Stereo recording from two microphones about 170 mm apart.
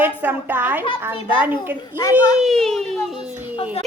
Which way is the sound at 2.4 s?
Centre (ahead or behind).